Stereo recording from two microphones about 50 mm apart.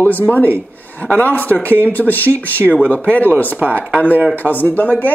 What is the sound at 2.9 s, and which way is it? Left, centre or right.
Speech, left.